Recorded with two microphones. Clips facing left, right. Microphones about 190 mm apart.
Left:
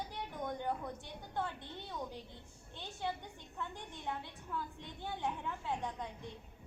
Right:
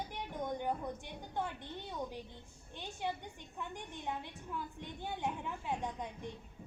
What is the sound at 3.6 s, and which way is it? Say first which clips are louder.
A woman's voice: right 1 dB; 15° right (ahead or behind).